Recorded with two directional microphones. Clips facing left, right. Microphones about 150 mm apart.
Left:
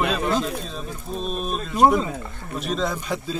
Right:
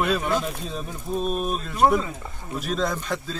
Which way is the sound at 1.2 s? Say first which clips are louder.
Right 1 dB; 5° right (ahead or behind).